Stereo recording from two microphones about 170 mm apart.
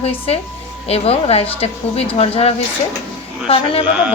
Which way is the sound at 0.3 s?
35° left (ahead or behind).